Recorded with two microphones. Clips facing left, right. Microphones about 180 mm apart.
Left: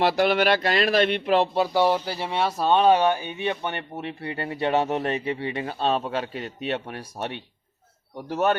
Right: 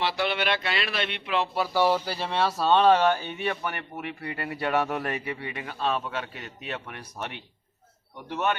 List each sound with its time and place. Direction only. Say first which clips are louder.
0.0 s speech: left 7 dB; 45° left (ahead or behind)
1.5 s speech: left 3 dB; 20° left (ahead or behind); by 8.5 s 35° left (ahead or behind)